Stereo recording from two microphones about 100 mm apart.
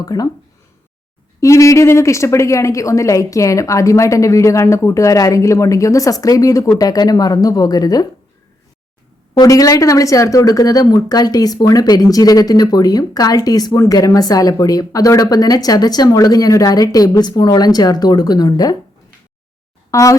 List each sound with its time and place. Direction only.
0.0 s speech: 40° left (ahead or behind)
1.4 s speech: 30° left (ahead or behind)
9.4 s speech: 35° left (ahead or behind)
19.9 s speech: 35° left (ahead or behind)